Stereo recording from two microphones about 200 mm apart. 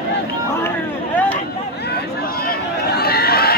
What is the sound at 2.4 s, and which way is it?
Run, 50° left (ahead or behind).